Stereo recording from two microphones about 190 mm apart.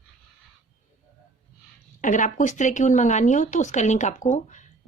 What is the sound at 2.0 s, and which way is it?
Speech, 40° left (ahead or behind).